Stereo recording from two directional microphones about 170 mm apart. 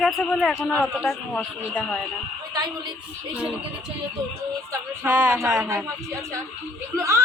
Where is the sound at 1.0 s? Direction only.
Centre (ahead or behind).